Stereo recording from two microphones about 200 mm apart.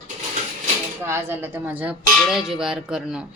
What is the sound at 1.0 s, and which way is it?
A woman's voice, 10° right (ahead or behind).